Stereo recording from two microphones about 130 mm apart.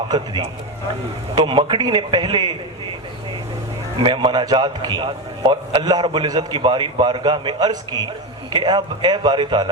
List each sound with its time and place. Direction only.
1.4 s a man's voice: 40° right (ahead or behind)
4.0 s a man's voice: 35° right (ahead or behind)